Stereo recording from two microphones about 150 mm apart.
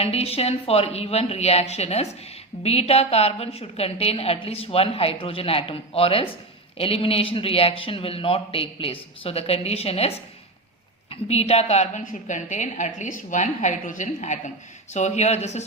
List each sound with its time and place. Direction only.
0.0 s a woman's voice: 40° left (ahead or behind)